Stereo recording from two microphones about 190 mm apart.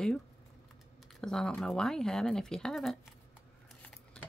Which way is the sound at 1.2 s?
5° left (ahead or behind).